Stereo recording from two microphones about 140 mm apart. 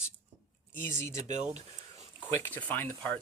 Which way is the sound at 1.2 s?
55° right (ahead or behind).